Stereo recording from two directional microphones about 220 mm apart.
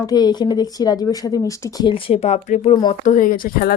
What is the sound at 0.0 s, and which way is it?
Speech, 20° left (ahead or behind).